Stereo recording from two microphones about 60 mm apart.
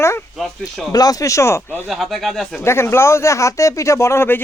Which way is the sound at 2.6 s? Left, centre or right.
Left.